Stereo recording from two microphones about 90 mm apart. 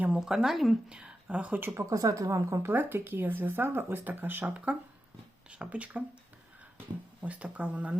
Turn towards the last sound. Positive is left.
turn(degrees=-15)  # may be behind; listen again after turning